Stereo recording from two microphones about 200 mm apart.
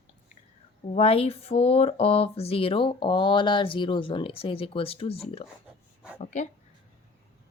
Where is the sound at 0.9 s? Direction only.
30° left (ahead or behind).